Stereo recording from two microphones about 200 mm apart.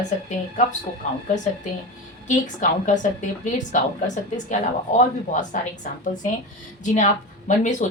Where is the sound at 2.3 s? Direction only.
40° left (ahead or behind).